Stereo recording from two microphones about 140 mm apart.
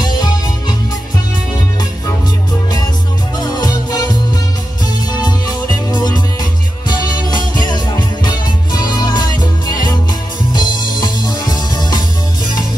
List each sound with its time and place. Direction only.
0.2 s music: 30° left (ahead or behind)
3.3 s music: 30° left (ahead or behind)
5.2 s music: 30° left (ahead or behind)